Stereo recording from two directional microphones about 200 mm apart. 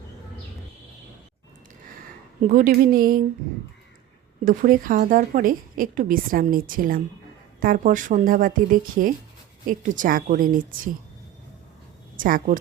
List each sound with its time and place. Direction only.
2.4 s a woman's voice: 45° right (ahead or behind)
4.4 s a woman's voice: 45° right (ahead or behind)
12.1 s a woman's voice: 45° right (ahead or behind)